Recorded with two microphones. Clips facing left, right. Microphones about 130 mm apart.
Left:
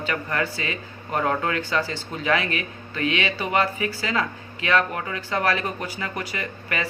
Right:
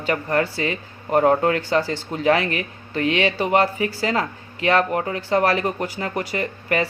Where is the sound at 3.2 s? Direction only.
55° right (ahead or behind).